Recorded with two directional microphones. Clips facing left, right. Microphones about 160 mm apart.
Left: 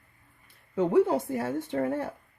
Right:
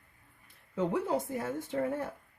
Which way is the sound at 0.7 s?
65° left (ahead or behind).